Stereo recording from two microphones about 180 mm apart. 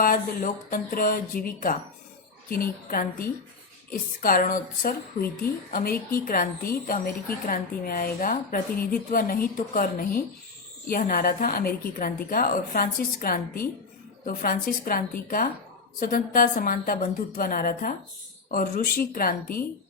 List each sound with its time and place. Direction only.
0.0 s a woman's voice: 50° left (ahead or behind)